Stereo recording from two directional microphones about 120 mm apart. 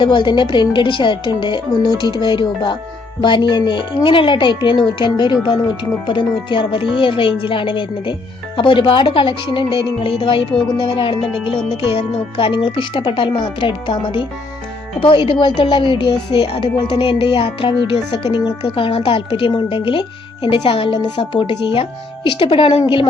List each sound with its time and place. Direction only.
0.0 s speech: 40° left (ahead or behind)